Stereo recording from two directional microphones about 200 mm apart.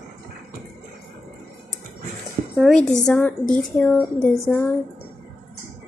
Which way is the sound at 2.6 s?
Centre (ahead or behind).